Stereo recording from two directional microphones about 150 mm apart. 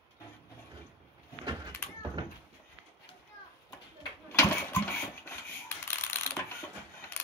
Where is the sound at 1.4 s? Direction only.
30° right (ahead or behind).